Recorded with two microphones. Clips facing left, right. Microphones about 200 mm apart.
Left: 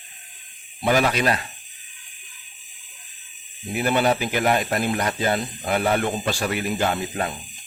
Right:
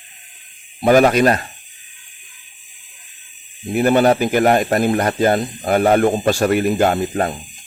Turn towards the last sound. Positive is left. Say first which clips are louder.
# right 7 dB
turn(degrees=-45)  # may be behind; listen again after turning